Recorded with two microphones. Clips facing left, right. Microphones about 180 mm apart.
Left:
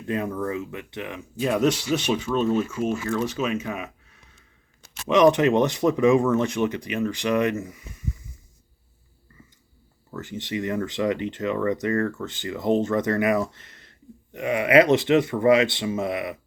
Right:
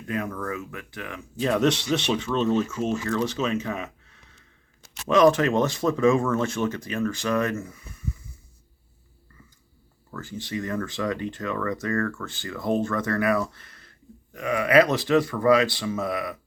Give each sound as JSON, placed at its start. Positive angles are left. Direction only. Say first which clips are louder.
{"t": 0.1, "sound": "speech", "louder": "left 3 dB", "side_deg": 25}
{"t": 1.4, "sound": "speech", "louder": "even", "side_deg": 10}
{"t": 10.1, "sound": "speech", "louder": "left 2 dB", "side_deg": 20}